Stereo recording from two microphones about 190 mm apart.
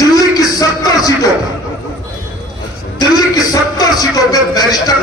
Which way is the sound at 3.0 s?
20° left (ahead or behind).